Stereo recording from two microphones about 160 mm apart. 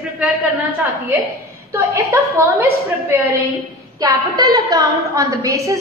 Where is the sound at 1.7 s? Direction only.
15° right (ahead or behind).